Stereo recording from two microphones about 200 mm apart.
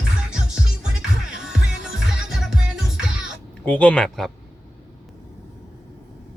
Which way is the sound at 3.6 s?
5° left (ahead or behind).